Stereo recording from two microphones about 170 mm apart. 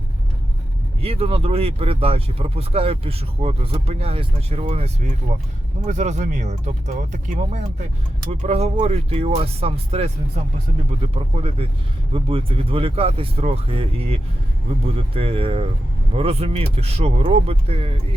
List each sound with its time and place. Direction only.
1.0 s speech: 35° right (ahead or behind)